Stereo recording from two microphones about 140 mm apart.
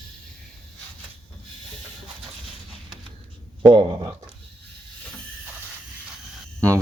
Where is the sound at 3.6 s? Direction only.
35° right (ahead or behind).